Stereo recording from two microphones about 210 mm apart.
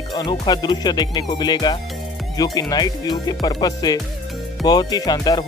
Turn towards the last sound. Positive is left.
turn(degrees=20)  # may be behind; listen again after turning